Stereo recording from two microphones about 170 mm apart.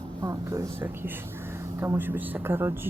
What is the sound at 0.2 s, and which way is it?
Speech, 20° right (ahead or behind).